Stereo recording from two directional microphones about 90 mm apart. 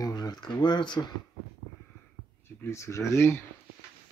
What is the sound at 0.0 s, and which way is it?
Speech, 45° left (ahead or behind).